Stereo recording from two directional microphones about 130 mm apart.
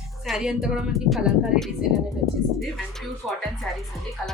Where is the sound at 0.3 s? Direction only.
5° right (ahead or behind).